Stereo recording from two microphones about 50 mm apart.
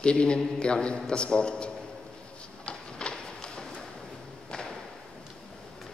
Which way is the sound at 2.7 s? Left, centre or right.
Centre.